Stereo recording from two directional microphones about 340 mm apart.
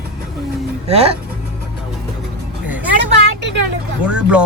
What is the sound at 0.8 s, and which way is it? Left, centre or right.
Speech, centre.